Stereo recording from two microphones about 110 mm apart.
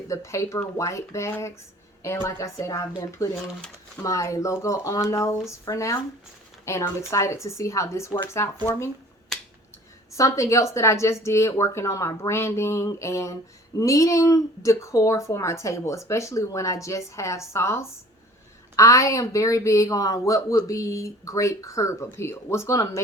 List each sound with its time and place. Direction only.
0.1 s speech: 30° left (ahead or behind)
9.3 s finger snapping: 5° left (ahead or behind)
10.1 s speech: 30° left (ahead or behind)